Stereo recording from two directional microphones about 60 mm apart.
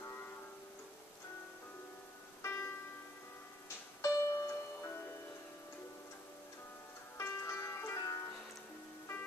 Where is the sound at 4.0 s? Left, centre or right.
Left.